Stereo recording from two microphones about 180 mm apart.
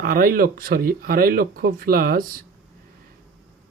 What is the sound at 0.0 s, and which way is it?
Speech, 50° right (ahead or behind).